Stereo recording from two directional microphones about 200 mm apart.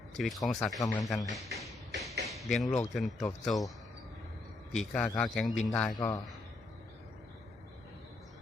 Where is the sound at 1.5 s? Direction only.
55° right (ahead or behind).